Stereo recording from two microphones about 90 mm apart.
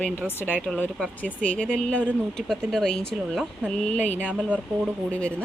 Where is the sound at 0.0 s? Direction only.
20° left (ahead or behind).